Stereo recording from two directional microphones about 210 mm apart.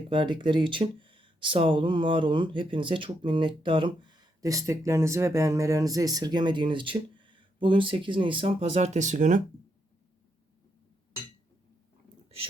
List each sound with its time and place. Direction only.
0.1 s speech: 20° right (ahead or behind)